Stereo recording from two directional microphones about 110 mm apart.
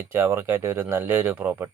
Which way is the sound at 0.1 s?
25° right (ahead or behind).